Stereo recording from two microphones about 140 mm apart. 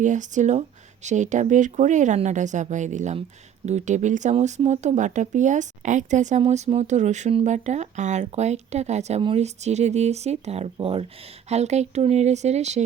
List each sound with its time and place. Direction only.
0.0 s speech: 60° right (ahead or behind); by 11.0 s 40° right (ahead or behind)
11.4 s speech: 50° right (ahead or behind)